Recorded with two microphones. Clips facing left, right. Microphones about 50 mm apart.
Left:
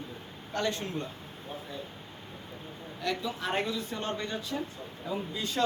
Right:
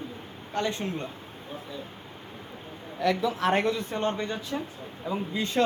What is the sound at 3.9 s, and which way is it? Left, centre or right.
Speech, right.